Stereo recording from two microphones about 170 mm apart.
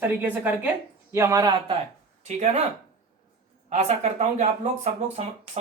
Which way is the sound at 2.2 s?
40° right (ahead or behind).